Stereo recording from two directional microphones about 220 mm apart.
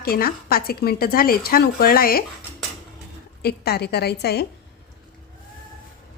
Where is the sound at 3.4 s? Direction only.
45° left (ahead or behind).